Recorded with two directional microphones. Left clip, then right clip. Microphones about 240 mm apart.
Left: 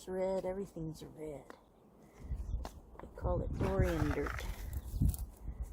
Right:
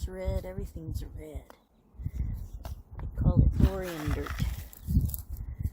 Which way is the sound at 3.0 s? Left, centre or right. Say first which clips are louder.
Right 2 dB; right.